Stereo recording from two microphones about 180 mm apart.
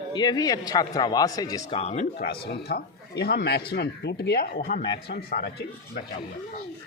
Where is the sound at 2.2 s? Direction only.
60° left (ahead or behind).